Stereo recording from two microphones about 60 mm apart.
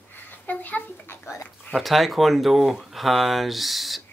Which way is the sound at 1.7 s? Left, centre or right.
Centre.